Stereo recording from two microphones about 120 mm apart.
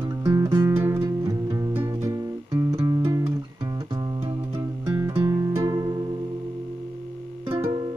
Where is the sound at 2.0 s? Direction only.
25° right (ahead or behind).